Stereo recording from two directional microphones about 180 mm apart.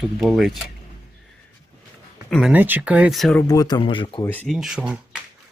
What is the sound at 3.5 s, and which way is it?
Speech, 20° left (ahead or behind).